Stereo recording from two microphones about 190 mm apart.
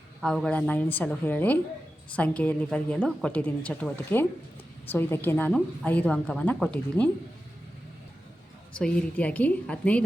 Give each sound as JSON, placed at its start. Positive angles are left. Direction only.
{"t": 0.2, "sound": "a woman's voice", "side_deg": 0}
{"t": 8.8, "sound": "a woman's voice", "side_deg": 5}